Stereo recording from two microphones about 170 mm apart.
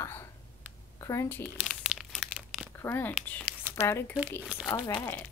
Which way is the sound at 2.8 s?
10° left (ahead or behind).